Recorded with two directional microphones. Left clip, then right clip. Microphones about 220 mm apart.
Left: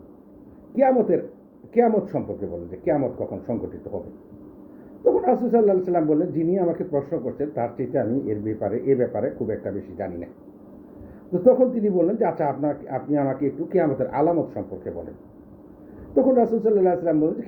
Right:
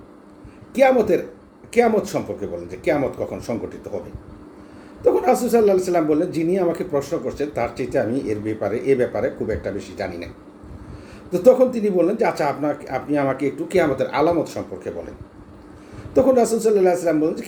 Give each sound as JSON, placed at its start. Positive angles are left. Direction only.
{"t": 0.8, "sound": "speech", "side_deg": -15}
{"t": 5.0, "sound": "a sound", "side_deg": -15}
{"t": 5.4, "sound": "speech", "side_deg": -15}
{"t": 11.3, "sound": "speech", "side_deg": -15}
{"t": 16.1, "sound": "speech", "side_deg": -15}